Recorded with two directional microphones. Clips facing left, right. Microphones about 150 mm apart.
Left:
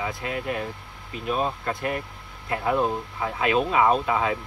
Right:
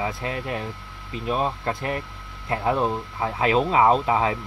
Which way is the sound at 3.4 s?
30° right (ahead or behind).